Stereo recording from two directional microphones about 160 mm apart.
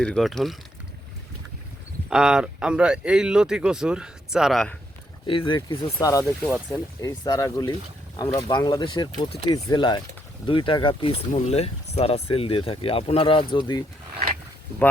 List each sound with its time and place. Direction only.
0.0 s speech: 5° left (ahead or behind)
2.0 s speech: 5° right (ahead or behind)
5.2 s speech: 30° left (ahead or behind)
5.5 s speech: 20° left (ahead or behind)
11.3 s speech: 40° left (ahead or behind)